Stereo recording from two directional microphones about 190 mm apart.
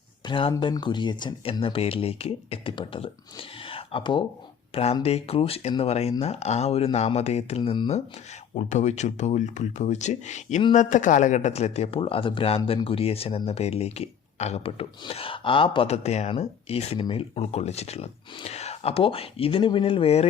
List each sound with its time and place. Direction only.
0.3 s speech: 30° left (ahead or behind)